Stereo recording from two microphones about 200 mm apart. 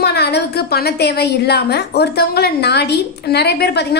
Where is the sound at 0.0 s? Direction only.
55° left (ahead or behind).